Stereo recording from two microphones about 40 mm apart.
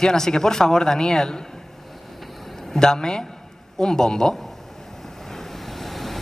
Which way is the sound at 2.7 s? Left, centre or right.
Centre.